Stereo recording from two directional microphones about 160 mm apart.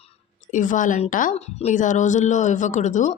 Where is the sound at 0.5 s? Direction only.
50° left (ahead or behind).